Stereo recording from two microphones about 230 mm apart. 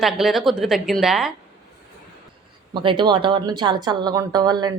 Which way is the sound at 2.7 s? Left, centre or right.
Right.